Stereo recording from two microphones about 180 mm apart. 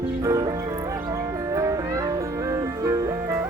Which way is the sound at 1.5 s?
20° right (ahead or behind).